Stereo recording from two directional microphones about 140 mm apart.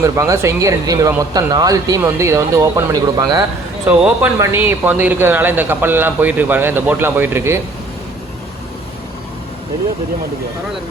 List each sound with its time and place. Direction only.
0.0 s speech: 20° right (ahead or behind)
3.8 s a man's voice: 10° right (ahead or behind)